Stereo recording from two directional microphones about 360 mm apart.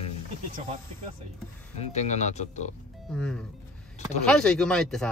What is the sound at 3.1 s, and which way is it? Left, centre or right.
Speech, centre.